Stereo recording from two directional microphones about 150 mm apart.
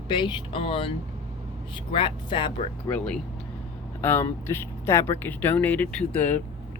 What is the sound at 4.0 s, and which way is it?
Speech, 15° left (ahead or behind).